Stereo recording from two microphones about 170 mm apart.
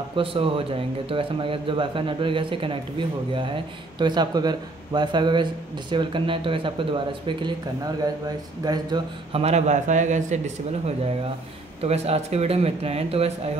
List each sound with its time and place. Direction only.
0.1 s a man's voice: 30° right (ahead or behind)
9.4 s a man's voice: 40° right (ahead or behind)
11.8 s a man's voice: 35° right (ahead or behind)